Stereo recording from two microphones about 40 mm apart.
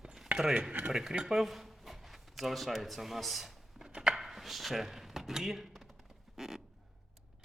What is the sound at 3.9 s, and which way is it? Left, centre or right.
Chopping, centre.